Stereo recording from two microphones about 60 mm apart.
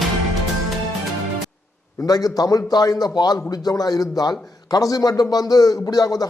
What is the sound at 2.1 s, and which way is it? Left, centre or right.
Speech, left.